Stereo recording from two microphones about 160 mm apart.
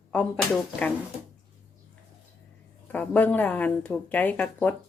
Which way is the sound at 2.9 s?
10° left (ahead or behind).